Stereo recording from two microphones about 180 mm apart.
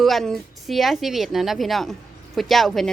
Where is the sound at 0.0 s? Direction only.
Centre (ahead or behind).